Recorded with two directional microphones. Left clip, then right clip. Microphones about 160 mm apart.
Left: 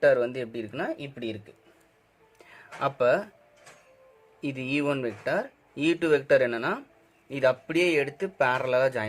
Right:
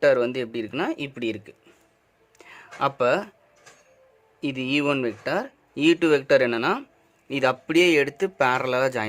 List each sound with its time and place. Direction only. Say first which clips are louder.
0.0 s speech: right 2 dB; 45° right (ahead or behind); by 1.5 s 60° right (ahead or behind)
2.4 s speech: right 4 dB; 35° right (ahead or behind)
4.4 s speech: right 4 dB; 35° right (ahead or behind)